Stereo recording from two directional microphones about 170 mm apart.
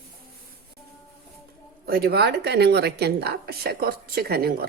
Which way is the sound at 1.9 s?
65° right (ahead or behind).